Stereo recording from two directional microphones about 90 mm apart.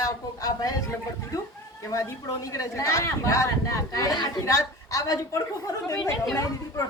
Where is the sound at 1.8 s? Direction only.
35° left (ahead or behind).